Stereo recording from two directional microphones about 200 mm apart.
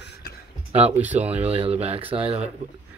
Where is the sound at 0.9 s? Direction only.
10° right (ahead or behind).